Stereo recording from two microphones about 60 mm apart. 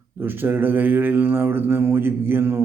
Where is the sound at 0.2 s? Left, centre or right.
Right.